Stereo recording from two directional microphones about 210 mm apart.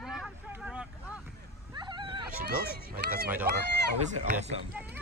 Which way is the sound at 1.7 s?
20° right (ahead or behind).